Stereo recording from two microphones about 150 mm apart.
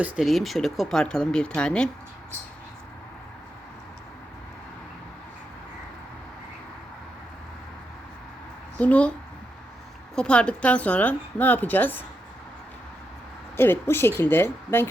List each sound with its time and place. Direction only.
0.0 s speech: centre (ahead or behind)
8.8 s a woman's voice: 10° left (ahead or behind)
10.2 s a woman's voice: 5° left (ahead or behind)
13.6 s a woman's voice: 15° left (ahead or behind)